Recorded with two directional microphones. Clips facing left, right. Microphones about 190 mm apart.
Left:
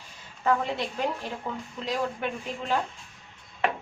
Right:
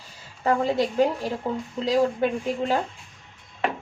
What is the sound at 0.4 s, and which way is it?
Speech, 35° right (ahead or behind).